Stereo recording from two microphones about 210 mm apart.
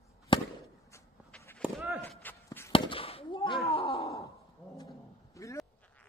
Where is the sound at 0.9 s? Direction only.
10° left (ahead or behind).